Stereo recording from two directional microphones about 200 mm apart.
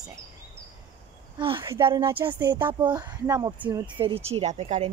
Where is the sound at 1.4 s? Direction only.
25° right (ahead or behind).